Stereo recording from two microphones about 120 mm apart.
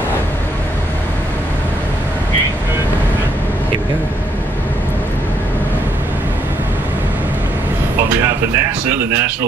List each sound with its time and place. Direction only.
8.5 s speech: 20° right (ahead or behind)